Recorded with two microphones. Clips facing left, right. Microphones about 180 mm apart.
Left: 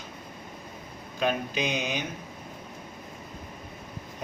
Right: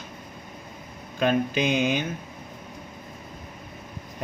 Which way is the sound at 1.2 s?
50° right (ahead or behind).